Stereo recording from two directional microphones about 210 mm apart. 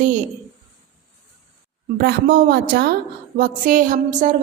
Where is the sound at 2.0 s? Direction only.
50° right (ahead or behind).